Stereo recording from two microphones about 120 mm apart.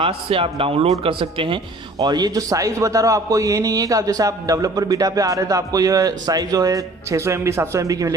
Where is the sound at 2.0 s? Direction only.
35° right (ahead or behind).